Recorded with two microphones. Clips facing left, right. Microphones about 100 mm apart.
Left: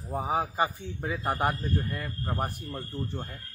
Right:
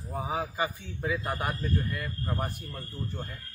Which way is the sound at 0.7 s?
40° left (ahead or behind).